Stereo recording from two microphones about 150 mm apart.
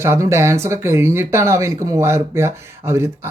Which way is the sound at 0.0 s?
15° right (ahead or behind).